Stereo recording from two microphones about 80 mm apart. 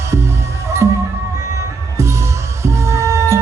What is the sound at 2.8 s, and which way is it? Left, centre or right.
Music, right.